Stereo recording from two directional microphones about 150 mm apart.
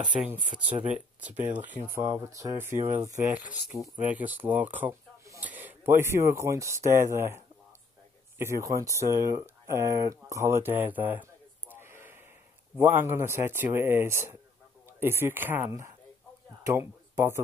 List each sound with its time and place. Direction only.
0.0 s speech: 10° right (ahead or behind)
2.0 s speech: 20° right (ahead or behind)
3.3 s speech: 5° right (ahead or behind)
4.5 s a sound: 10° right (ahead or behind)
5.5 s speech: 10° right (ahead or behind)